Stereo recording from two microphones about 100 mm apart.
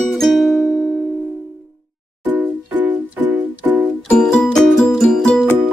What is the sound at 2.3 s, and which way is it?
Music, 15° right (ahead or behind).